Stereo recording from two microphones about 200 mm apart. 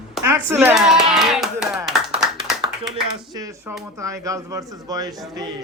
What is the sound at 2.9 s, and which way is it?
A man's voice, 20° right (ahead or behind).